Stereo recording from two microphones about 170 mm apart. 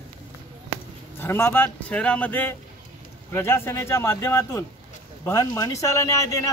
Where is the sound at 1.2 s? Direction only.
15° left (ahead or behind).